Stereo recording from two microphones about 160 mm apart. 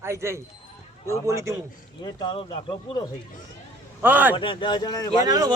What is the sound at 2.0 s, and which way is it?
Speech, 25° left (ahead or behind).